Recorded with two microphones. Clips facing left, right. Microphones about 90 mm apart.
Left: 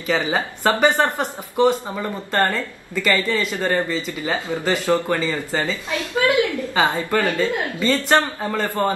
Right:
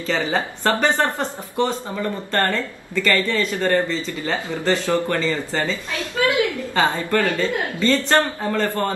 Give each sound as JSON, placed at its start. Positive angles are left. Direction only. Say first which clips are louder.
{"t": 0.0, "sound": "speech", "louder": "left 1 dB", "side_deg": 15}
{"t": 6.2, "sound": "a sound", "louder": "left 1 dB", "side_deg": 20}
{"t": 6.7, "sound": "speech", "louder": "right 1 dB", "side_deg": 10}